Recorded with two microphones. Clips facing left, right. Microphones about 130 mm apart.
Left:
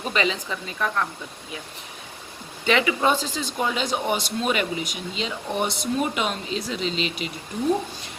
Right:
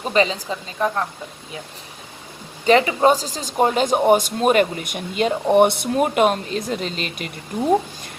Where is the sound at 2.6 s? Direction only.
40° right (ahead or behind).